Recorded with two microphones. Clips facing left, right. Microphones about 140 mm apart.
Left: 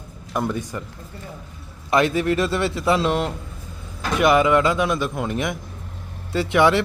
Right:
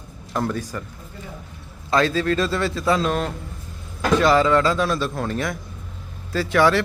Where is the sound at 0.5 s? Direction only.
20° left (ahead or behind).